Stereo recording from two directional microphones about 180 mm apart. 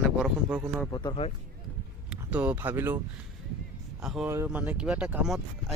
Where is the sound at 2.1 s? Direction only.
5° right (ahead or behind).